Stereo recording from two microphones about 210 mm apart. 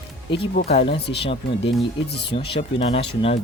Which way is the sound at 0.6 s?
30° left (ahead or behind).